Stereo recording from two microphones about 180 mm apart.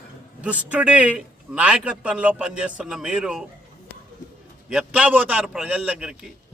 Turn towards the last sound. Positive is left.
turn(degrees=-5)  # may be behind; listen again after turning